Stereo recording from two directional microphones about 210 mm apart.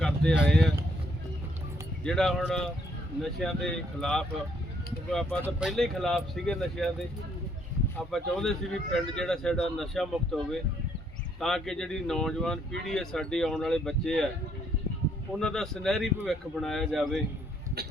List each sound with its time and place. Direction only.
0.0 s speech: 5° left (ahead or behind)
2.0 s speech: centre (ahead or behind)
5.4 s speech: 5° right (ahead or behind)
7.9 s speech: centre (ahead or behind)
15.3 s speech: centre (ahead or behind)